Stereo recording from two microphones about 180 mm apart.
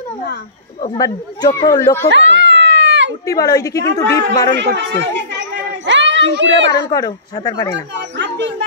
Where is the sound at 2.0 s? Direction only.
90° right.